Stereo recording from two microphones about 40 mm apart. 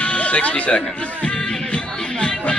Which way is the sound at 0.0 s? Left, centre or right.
Left.